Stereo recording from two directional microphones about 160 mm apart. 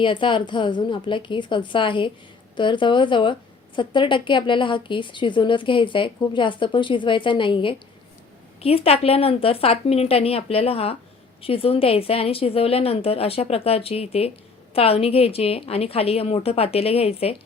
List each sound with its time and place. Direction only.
0.0 s speech: 30° left (ahead or behind)